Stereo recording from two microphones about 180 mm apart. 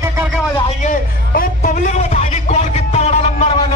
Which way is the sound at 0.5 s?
35° left (ahead or behind).